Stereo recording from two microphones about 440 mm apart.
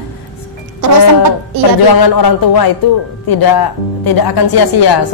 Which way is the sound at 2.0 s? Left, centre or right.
Left.